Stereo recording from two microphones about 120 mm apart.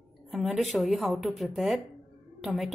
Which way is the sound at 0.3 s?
Centre (ahead or behind).